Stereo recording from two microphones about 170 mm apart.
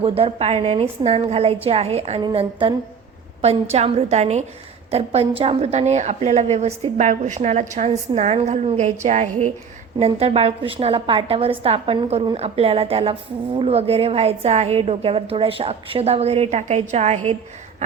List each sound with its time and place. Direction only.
0.0 s a woman's voice: 35° right (ahead or behind)